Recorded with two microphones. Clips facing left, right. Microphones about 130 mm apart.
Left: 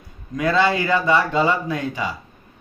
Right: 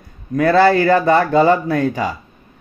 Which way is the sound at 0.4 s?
55° right (ahead or behind).